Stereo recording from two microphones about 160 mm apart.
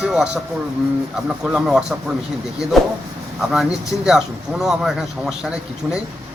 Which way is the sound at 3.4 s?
5° right (ahead or behind).